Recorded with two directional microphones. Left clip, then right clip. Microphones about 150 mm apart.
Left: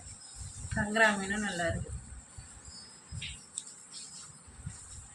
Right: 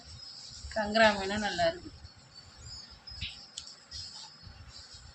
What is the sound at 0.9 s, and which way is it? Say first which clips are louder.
Speech: right 2 dB; 75° right (ahead or behind).